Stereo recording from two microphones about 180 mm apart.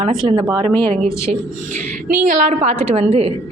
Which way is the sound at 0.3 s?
25° right (ahead or behind).